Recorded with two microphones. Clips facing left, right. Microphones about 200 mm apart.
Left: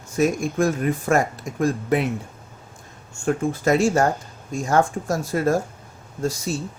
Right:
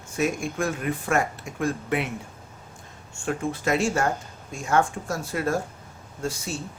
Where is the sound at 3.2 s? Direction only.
45° left (ahead or behind).